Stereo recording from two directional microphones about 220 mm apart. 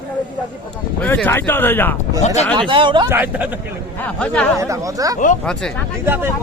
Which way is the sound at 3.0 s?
10° right (ahead or behind).